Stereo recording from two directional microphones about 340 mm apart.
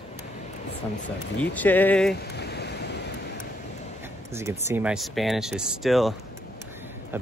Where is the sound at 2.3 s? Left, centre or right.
Left.